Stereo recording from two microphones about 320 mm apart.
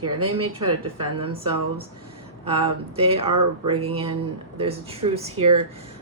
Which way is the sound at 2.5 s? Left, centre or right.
Centre.